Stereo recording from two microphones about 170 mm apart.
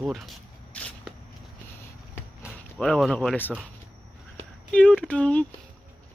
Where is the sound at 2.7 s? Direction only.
5° left (ahead or behind).